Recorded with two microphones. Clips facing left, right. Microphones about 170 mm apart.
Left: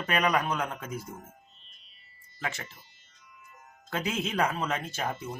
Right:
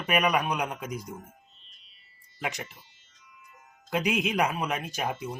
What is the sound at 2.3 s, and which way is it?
Speech, 15° right (ahead or behind).